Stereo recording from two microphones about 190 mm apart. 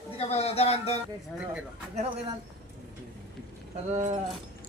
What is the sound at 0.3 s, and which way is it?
Speech, 30° left (ahead or behind).